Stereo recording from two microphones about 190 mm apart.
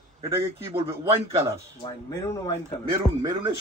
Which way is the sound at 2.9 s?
20° right (ahead or behind).